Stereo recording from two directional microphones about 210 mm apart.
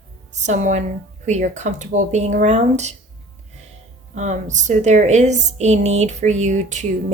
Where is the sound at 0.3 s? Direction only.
35° right (ahead or behind).